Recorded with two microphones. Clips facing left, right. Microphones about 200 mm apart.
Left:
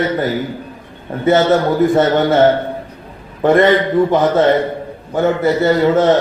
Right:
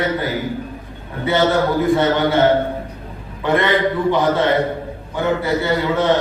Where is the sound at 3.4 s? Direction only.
45° left (ahead or behind).